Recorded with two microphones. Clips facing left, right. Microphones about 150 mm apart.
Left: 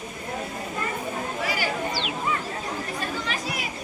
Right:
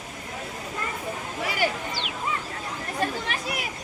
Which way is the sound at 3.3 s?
60° right (ahead or behind).